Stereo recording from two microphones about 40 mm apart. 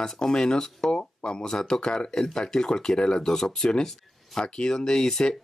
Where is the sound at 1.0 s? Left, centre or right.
Left.